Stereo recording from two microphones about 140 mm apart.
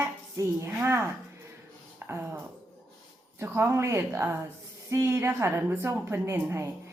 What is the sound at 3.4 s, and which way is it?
A woman's voice, 20° right (ahead or behind).